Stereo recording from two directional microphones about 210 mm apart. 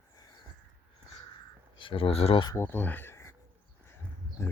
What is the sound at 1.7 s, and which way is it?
Speech, 25° left (ahead or behind).